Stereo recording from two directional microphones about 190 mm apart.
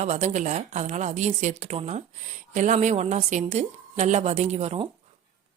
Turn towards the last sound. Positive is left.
turn(degrees=-35)  # may be behind; listen again after turning